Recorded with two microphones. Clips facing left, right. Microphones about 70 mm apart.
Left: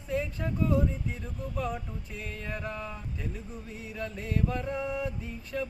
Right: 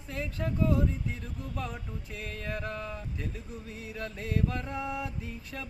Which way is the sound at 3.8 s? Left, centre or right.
Centre.